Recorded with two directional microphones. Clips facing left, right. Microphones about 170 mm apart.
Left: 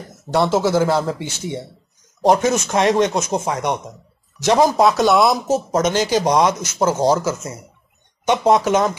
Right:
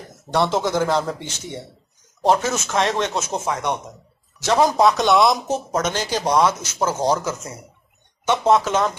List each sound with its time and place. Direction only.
0.3 s a man's voice: 5° left (ahead or behind)
4.7 s a man's voice: centre (ahead or behind)